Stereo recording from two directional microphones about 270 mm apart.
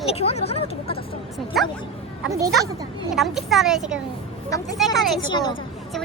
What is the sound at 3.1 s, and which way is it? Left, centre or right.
Speech, centre.